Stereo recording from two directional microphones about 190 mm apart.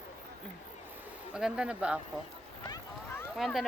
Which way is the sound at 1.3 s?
5° right (ahead or behind).